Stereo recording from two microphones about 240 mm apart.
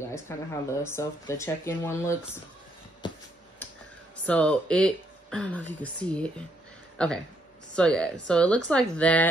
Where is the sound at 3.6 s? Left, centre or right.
Centre.